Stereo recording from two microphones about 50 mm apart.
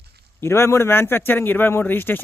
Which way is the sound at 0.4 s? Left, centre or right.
Left.